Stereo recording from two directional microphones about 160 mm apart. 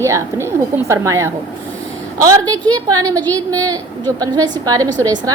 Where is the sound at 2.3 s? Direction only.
20° right (ahead or behind).